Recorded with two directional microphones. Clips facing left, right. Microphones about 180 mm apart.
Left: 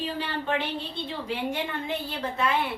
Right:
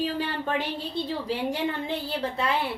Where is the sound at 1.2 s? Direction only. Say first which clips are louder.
Even; 35° right (ahead or behind).